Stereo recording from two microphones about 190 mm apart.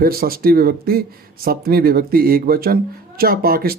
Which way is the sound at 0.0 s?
50° right (ahead or behind).